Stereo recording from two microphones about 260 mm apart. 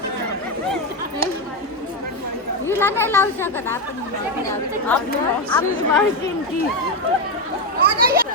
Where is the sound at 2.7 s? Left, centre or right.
Centre.